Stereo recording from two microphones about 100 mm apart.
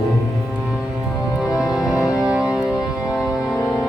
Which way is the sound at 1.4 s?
5° right (ahead or behind).